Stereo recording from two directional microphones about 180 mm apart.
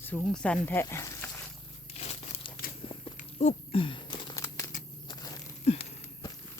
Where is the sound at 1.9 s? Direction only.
35° left (ahead or behind).